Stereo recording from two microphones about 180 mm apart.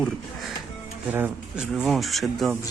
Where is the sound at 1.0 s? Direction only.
10° right (ahead or behind).